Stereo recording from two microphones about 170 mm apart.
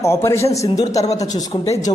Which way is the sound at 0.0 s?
15° left (ahead or behind).